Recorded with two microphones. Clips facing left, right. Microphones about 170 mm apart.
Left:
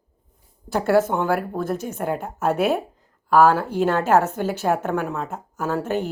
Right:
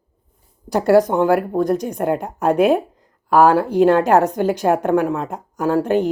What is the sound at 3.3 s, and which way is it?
A woman's voice, 15° right (ahead or behind).